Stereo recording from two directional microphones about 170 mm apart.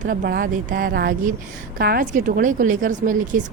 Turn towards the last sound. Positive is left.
turn(degrees=-50)  # may be behind; listen again after turning